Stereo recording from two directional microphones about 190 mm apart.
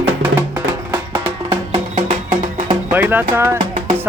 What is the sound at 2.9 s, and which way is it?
Speech, 10° right (ahead or behind).